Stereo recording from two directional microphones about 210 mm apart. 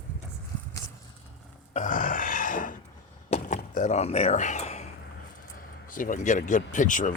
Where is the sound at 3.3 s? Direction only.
35° left (ahead or behind).